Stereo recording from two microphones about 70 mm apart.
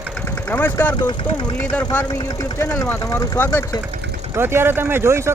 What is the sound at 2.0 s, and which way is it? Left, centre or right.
Speech, left.